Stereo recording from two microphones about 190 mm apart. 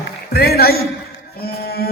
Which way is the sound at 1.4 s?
55° left (ahead or behind).